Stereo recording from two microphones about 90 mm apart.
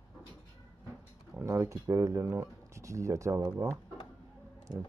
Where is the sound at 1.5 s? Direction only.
35° right (ahead or behind).